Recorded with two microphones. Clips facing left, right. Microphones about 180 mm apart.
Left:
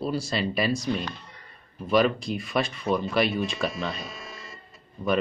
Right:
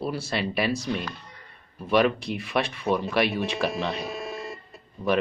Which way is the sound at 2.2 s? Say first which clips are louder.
Even; 65° right (ahead or behind).